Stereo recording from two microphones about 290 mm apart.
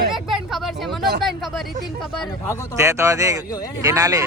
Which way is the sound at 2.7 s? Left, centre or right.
Centre.